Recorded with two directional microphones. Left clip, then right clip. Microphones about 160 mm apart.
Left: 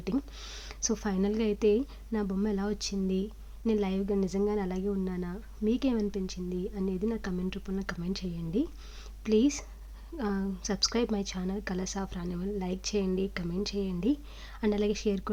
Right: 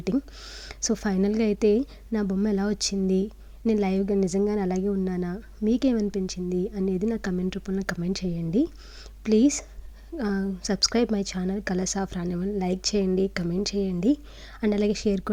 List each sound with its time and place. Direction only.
0.4 s speech: 20° right (ahead or behind)